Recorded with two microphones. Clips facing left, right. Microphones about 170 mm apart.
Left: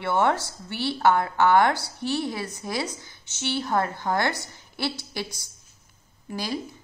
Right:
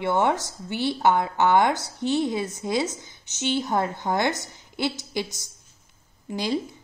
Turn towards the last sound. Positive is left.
turn(degrees=-20)  # may be behind; listen again after turning